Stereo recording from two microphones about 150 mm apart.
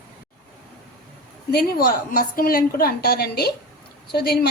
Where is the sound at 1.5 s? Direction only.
85° left.